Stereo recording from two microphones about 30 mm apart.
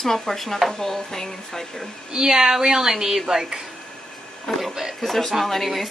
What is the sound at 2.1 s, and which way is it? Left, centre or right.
A woman's voice, centre.